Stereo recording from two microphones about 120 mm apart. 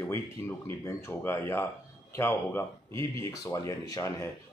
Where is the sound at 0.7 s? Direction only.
20° left (ahead or behind).